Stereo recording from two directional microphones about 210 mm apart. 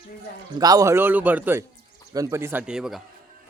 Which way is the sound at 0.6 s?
15° right (ahead or behind).